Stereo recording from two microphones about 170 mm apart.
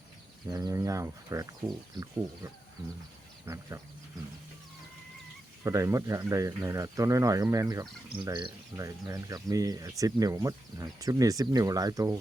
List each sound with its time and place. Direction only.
0.5 s speech: 20° right (ahead or behind)
3.4 s speech: 15° right (ahead or behind)
5.6 s speech: 20° right (ahead or behind)